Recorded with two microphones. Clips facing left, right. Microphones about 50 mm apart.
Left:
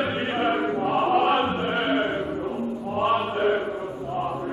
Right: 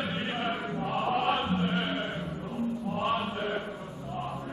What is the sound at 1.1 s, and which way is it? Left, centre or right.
Chant, centre.